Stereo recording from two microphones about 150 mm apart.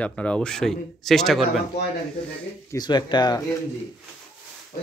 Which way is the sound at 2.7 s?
30° left (ahead or behind).